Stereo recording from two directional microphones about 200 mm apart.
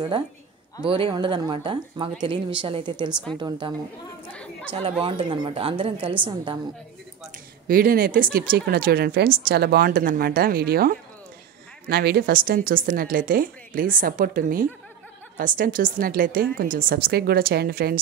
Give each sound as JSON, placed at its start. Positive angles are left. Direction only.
{"t": 0.8, "sound": "speech", "side_deg": -25}
{"t": 3.1, "sound": "a woman's voice", "side_deg": -5}
{"t": 3.3, "sound": "speech", "side_deg": -25}
{"t": 7.6, "sound": "a woman's voice", "side_deg": -45}